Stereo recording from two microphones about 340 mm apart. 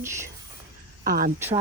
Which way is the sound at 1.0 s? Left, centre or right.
Right.